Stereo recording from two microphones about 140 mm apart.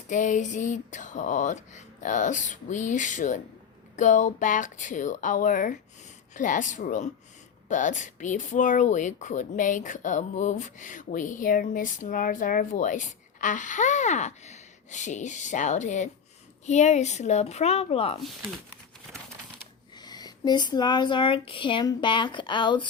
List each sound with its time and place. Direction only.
0.1 s speech: 60° left (ahead or behind); by 18.2 s 45° left (ahead or behind)
20.0 s speech: 30° left (ahead or behind)